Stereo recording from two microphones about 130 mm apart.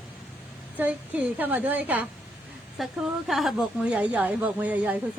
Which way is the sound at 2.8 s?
Centre (ahead or behind).